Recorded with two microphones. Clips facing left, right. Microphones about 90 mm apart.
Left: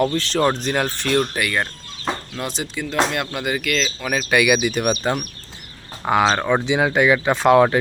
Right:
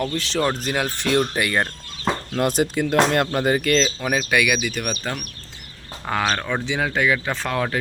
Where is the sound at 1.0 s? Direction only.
15° right (ahead or behind).